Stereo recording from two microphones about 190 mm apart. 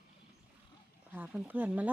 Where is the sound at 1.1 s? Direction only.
5° right (ahead or behind).